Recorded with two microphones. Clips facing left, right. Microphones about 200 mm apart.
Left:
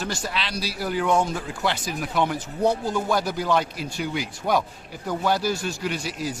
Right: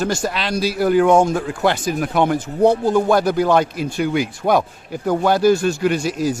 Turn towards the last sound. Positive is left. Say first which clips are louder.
# right 9 dB
turn(degrees=-45)  # may be behind; listen again after turning